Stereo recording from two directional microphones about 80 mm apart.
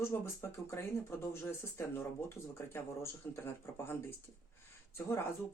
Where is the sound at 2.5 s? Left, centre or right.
Left.